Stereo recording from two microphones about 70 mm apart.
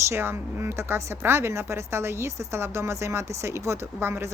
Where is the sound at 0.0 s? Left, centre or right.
Right.